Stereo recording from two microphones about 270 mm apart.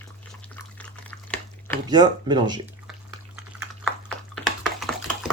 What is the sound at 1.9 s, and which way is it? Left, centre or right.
Speech, centre.